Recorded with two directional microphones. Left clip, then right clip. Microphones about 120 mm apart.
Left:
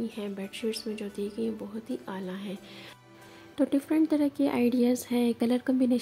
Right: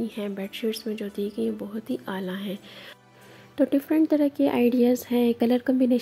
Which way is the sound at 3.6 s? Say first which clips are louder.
Right 4 dB; 15° right (ahead or behind).